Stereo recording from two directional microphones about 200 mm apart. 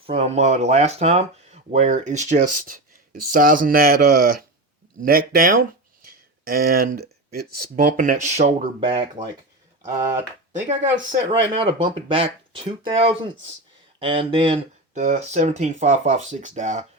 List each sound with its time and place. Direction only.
0.0 s speech: 30° right (ahead or behind)
10.5 s speech: 40° right (ahead or behind)
11.3 s speech: 25° right (ahead or behind)